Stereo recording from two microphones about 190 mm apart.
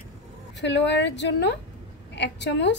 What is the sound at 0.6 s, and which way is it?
A woman's voice, 65° left (ahead or behind).